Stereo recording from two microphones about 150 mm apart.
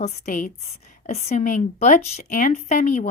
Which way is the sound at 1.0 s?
45° left (ahead or behind).